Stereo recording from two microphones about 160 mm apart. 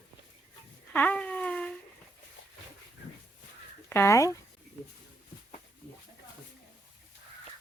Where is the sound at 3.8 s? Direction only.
15° left (ahead or behind).